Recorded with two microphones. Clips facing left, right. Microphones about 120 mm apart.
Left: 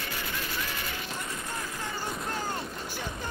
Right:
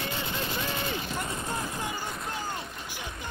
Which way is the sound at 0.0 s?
25° right (ahead or behind).